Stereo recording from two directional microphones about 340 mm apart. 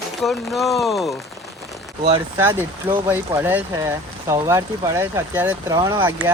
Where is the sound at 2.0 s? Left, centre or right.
Centre.